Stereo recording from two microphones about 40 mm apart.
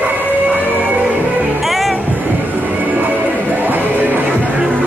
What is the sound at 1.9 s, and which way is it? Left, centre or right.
Music, right.